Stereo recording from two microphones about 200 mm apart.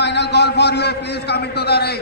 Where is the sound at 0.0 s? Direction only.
60° left (ahead or behind).